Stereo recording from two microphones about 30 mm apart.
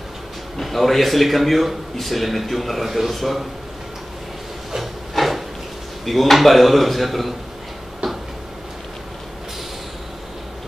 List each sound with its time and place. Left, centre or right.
0.6 s a man's voice: centre
5.1 s drawer open or close: centre
6.3 s a man's voice: centre
8.0 s a sound: right